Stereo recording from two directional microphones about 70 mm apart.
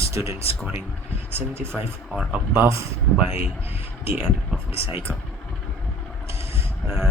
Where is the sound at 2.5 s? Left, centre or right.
Right.